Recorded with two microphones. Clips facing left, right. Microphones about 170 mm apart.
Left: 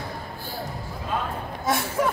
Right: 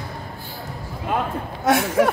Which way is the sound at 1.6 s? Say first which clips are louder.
Right 7 dB; 75° right (ahead or behind).